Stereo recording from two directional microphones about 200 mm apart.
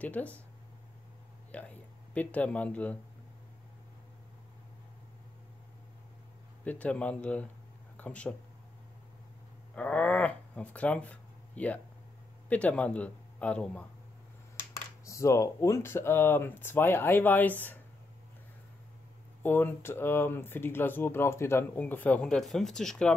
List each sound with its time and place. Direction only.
0.0 s speech: 5° left (ahead or behind)
1.5 s speech: 5° left (ahead or behind)
6.6 s speech: 5° left (ahead or behind)
9.8 s a man's voice: 5° left (ahead or behind)
15.0 s speech: 15° left (ahead or behind)
19.4 s speech: 10° left (ahead or behind)